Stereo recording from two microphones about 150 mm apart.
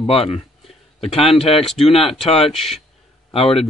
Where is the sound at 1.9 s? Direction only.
40° left (ahead or behind).